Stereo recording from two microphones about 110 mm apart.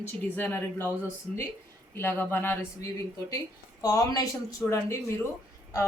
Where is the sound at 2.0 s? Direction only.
20° left (ahead or behind).